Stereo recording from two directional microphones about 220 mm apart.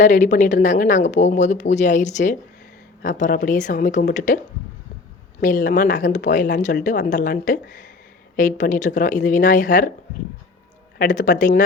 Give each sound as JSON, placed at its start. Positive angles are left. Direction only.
{"t": 0.0, "sound": "speech", "side_deg": 35}
{"t": 5.4, "sound": "speech", "side_deg": 40}
{"t": 10.9, "sound": "speech", "side_deg": 35}